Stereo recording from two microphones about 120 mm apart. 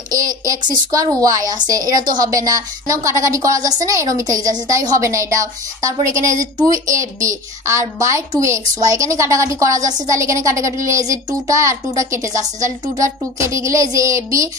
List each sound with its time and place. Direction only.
0.1 s a woman's voice: 30° right (ahead or behind)
12.5 s speech: 90° right
12.9 s a woman's voice: 25° right (ahead or behind)